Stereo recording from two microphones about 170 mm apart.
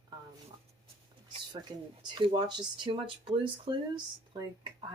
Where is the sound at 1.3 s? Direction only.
25° right (ahead or behind).